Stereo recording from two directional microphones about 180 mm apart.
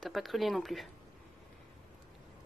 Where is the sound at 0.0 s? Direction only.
Centre (ahead or behind).